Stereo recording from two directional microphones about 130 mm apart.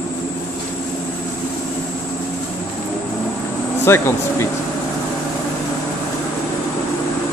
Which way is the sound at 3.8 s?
20° left (ahead or behind).